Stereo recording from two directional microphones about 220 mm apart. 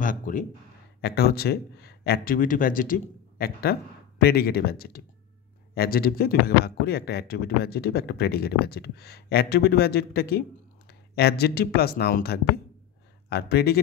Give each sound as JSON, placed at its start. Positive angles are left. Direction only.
{"t": 0.0, "sound": "speech", "side_deg": 35}
{"t": 1.0, "sound": "speech", "side_deg": 45}